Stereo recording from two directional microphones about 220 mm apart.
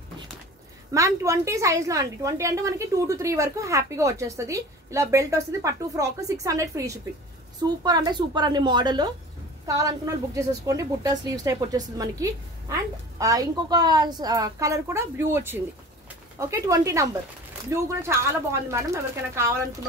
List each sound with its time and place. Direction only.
0.9 s a woman's voice: 15° right (ahead or behind)